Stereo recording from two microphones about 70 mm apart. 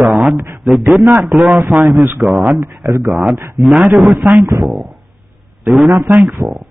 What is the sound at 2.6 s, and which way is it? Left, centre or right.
Speech, right.